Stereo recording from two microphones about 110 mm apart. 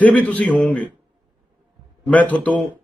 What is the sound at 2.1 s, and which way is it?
Speech, 15° left (ahead or behind).